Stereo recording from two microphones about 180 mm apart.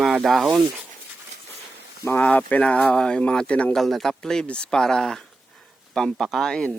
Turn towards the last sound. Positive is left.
turn(degrees=5)  # may be behind; listen again after turning